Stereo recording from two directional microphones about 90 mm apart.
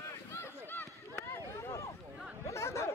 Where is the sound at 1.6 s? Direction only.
35° left (ahead or behind).